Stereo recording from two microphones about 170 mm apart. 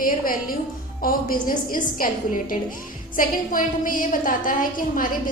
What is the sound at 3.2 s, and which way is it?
A woman's voice, 55° left (ahead or behind).